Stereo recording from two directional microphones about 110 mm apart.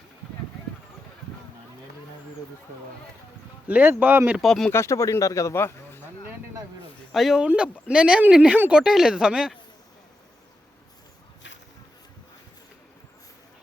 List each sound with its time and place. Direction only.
3.7 s speech: 15° right (ahead or behind)
4.4 s speech: 5° left (ahead or behind)
4.7 s speech: 25° left (ahead or behind)
7.1 s speech: centre (ahead or behind)